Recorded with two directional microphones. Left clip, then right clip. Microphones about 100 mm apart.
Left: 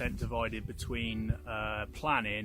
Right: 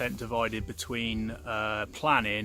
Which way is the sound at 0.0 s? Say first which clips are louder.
Right 5 dB; 40° right (ahead or behind).